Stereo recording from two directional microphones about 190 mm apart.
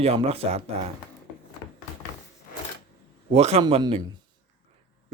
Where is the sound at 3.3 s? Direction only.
35° right (ahead or behind).